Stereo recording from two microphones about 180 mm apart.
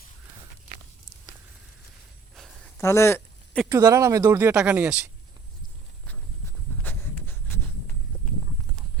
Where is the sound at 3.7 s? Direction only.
15° right (ahead or behind).